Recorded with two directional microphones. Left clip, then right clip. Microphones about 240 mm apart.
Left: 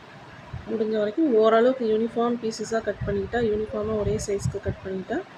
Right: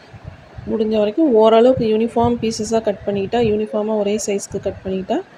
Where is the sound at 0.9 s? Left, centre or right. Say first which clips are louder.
Right 8 dB; right.